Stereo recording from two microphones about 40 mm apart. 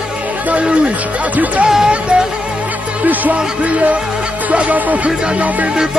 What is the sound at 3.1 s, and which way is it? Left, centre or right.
Speech, right.